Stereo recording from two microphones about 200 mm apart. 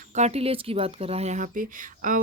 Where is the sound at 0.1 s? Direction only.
35° right (ahead or behind).